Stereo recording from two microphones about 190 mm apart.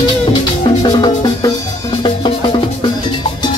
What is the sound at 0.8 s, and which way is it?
Music, 25° left (ahead or behind).